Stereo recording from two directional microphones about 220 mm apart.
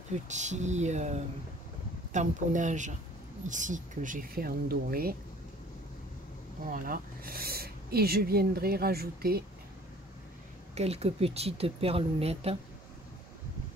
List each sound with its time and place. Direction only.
0.1 s speech: 30° right (ahead or behind)
2.1 s speech: 35° right (ahead or behind)
6.6 s speech: 40° right (ahead or behind)
10.7 s speech: 30° right (ahead or behind)